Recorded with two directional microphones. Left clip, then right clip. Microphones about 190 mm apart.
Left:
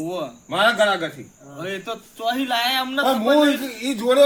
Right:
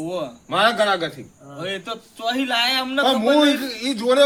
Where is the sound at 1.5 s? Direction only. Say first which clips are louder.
Right 1 dB; 15° right (ahead or behind).